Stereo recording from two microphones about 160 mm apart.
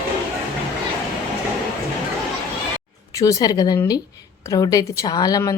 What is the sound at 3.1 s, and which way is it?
Speech, 20° left (ahead or behind).